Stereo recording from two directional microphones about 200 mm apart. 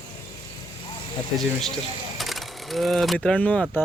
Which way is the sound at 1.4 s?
Centre (ahead or behind).